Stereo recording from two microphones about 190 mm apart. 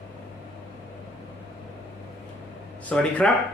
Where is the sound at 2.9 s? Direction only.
5° left (ahead or behind).